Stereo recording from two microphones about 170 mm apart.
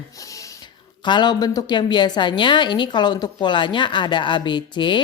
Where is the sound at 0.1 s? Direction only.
20° left (ahead or behind).